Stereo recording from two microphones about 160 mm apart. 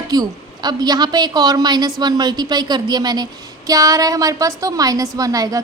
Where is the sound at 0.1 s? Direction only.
25° right (ahead or behind).